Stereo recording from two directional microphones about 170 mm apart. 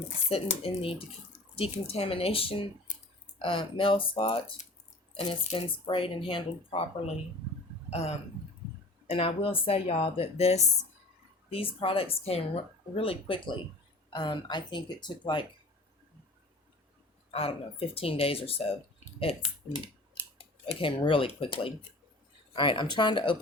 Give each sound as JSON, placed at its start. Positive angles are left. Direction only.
{"t": 0.3, "sound": "speech", "side_deg": 35}
{"t": 2.9, "sound": "a sound", "side_deg": 45}
{"t": 3.3, "sound": "speech", "side_deg": 30}
{"t": 17.3, "sound": "speech", "side_deg": 35}
{"t": 20.4, "sound": "speech", "side_deg": 30}